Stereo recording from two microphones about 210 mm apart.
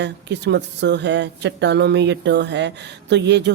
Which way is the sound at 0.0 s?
55° right (ahead or behind).